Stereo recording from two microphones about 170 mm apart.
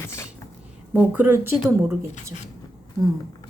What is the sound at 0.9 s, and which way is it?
Speech, 10° right (ahead or behind).